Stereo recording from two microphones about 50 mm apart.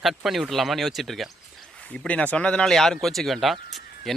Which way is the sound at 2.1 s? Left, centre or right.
Left.